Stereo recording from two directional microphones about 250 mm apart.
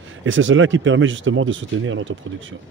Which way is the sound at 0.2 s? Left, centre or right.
Right.